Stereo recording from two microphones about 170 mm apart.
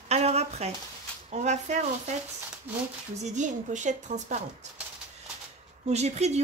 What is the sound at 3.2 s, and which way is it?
A woman's voice, 45° right (ahead or behind).